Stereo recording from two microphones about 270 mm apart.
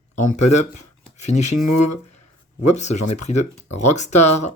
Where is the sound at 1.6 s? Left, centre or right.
Left.